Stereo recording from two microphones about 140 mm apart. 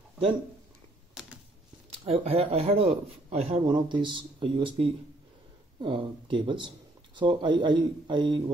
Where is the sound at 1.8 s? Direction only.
45° right (ahead or behind).